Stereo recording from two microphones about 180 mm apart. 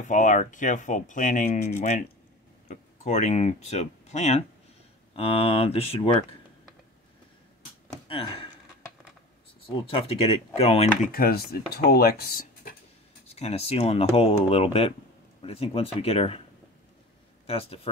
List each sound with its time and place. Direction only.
0.1 s speech: 45° left (ahead or behind)
8.1 s speech: 30° left (ahead or behind)
9.7 s speech: 30° left (ahead or behind)
11.1 s speech: 55° left (ahead or behind)
13.3 s speech: 35° left (ahead or behind)
17.5 s speech: 35° left (ahead or behind)